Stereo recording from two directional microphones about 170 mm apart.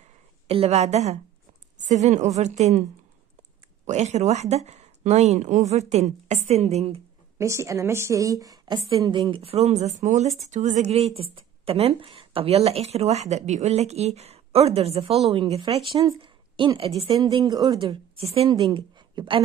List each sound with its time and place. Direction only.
0.5 s speech: 35° right (ahead or behind)
3.8 s speech: 40° right (ahead or behind)
7.3 s a woman's voice: 15° right (ahead or behind)
9.3 s a woman's voice: 35° right (ahead or behind)